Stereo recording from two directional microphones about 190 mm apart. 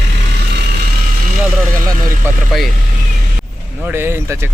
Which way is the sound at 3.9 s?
10° right (ahead or behind).